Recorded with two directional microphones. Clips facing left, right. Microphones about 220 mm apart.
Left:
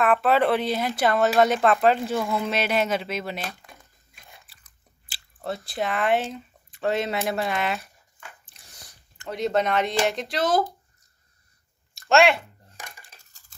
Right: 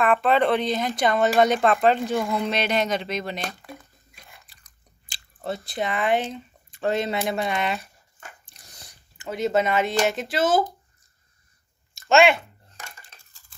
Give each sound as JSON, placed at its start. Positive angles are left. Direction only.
{"t": 0.0, "sound": "speech", "side_deg": 5}
{"t": 4.3, "sound": "chewing", "side_deg": 5}
{"t": 9.2, "sound": "speech", "side_deg": -5}
{"t": 11.9, "sound": "a sound", "side_deg": 0}
{"t": 12.7, "sound": "dishes", "side_deg": 15}
{"t": 13.2, "sound": "stir", "side_deg": 40}